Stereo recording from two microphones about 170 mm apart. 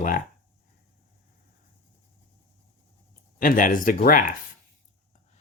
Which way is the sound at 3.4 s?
55° left (ahead or behind).